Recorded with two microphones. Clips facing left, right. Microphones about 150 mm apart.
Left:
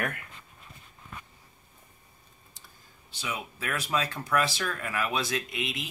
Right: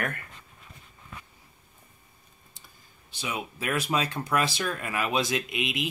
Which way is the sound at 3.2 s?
15° right (ahead or behind).